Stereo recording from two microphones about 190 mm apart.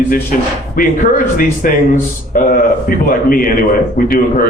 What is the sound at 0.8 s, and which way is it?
A man's voice, 45° left (ahead or behind).